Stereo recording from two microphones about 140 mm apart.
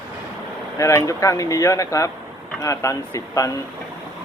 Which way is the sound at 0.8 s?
20° left (ahead or behind).